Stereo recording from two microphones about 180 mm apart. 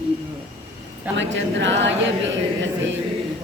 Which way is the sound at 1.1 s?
85° right.